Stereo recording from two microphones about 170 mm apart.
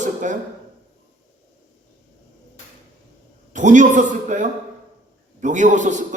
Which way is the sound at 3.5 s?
45° right (ahead or behind).